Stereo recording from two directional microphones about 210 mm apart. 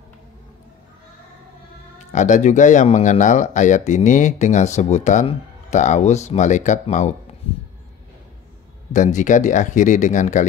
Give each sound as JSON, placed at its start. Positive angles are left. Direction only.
{"t": 2.0, "sound": "speech", "side_deg": 35}
{"t": 8.9, "sound": "speech", "side_deg": 35}